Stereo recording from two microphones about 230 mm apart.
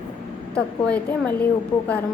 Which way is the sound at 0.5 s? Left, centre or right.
Centre.